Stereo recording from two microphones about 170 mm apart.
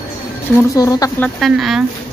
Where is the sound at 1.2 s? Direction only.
Centre (ahead or behind).